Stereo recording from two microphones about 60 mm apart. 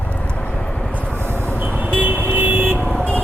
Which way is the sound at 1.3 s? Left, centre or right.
Left.